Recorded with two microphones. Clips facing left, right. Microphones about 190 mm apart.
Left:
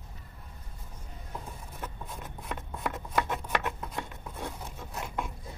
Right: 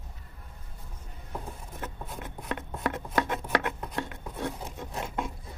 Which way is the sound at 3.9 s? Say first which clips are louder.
Right 4 dB; 65° right (ahead or behind).